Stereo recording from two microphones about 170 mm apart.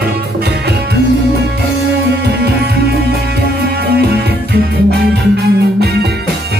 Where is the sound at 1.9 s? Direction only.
80° right.